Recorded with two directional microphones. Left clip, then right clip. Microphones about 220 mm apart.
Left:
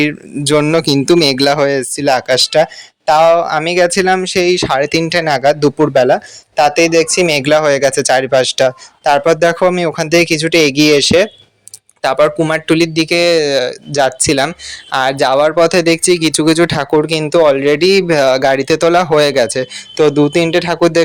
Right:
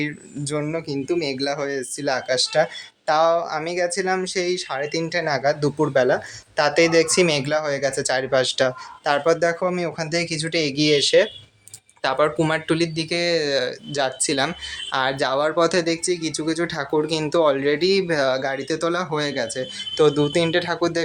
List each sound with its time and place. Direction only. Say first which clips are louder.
0.0 s speech: left 13 dB; 40° left (ahead or behind)
20.0 s speech: left 7 dB; 25° left (ahead or behind)